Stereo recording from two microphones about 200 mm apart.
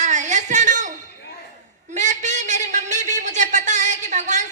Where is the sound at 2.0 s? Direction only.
40° right (ahead or behind).